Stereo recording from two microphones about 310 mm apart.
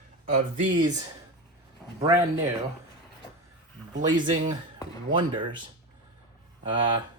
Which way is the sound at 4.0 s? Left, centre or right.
Centre.